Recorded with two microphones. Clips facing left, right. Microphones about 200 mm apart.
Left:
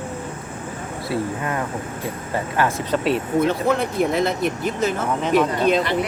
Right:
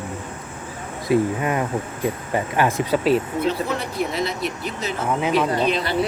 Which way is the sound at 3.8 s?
50° left (ahead or behind).